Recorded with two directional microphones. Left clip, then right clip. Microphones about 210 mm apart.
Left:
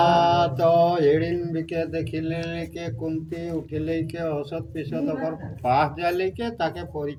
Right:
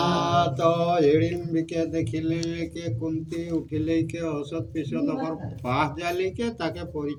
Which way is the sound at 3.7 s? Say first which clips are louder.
Right 2 dB; 15° left (ahead or behind).